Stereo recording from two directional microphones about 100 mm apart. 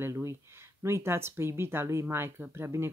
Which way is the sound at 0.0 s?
30° right (ahead or behind).